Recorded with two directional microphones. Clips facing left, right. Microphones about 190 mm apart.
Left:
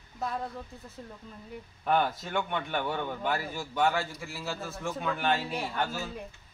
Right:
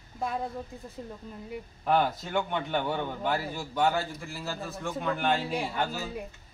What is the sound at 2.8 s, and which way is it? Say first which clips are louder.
A man's voice: right 1 dB; 10° right (ahead or behind).